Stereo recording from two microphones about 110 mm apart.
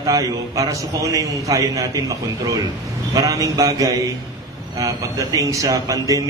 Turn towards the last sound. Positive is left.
turn(degrees=-30)  # may be behind; listen again after turning